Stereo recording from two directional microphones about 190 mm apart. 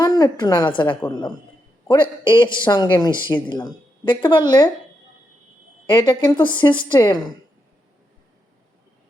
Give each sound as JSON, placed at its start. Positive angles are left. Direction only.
{"t": 0.0, "sound": "a woman's voice", "side_deg": 20}
{"t": 5.9, "sound": "a woman's voice", "side_deg": 25}